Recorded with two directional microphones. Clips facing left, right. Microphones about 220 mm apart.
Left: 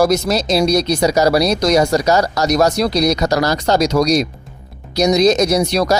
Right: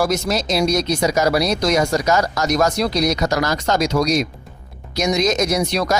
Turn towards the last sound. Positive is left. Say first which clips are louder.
# left 4 dB
turn(degrees=40)  # may be behind; listen again after turning